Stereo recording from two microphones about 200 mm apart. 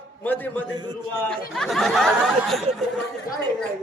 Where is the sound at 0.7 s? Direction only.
20° right (ahead or behind).